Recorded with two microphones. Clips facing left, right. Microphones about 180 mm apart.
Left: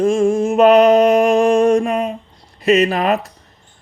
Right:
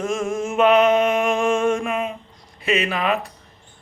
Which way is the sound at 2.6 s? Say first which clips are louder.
Left 7 dB; 40° left (ahead or behind).